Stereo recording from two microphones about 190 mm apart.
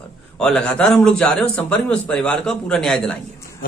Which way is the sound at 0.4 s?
5° left (ahead or behind).